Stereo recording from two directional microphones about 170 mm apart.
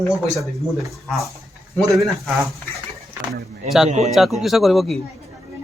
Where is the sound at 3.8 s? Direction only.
40° right (ahead or behind).